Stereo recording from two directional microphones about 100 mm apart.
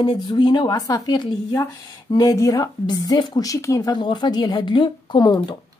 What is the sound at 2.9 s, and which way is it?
Speech, 45° left (ahead or behind).